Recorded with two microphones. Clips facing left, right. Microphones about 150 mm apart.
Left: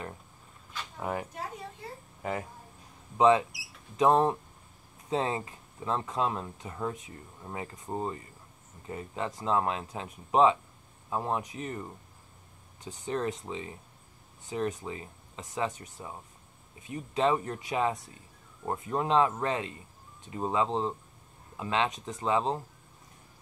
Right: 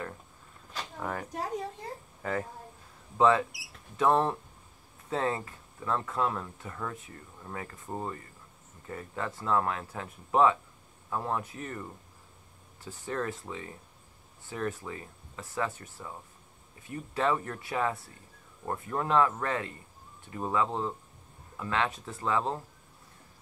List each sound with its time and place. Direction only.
0.9 s speech: 15° left (ahead or behind)
3.2 s speech: 20° left (ahead or behind)